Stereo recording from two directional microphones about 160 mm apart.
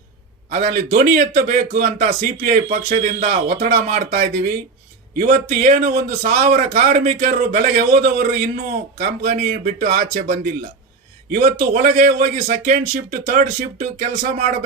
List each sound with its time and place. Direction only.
0.5 s a man's voice: 60° right (ahead or behind)